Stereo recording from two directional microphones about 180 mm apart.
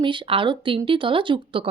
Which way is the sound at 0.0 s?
30° right (ahead or behind).